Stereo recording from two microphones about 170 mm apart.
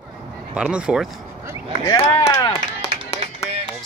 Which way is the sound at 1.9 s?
20° left (ahead or behind).